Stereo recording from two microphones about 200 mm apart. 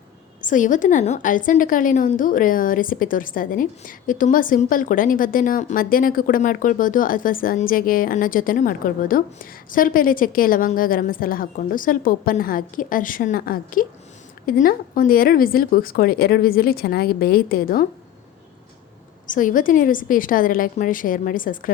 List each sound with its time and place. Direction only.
0.4 s a woman's voice: 40° left (ahead or behind)
19.3 s a woman's voice: 40° left (ahead or behind)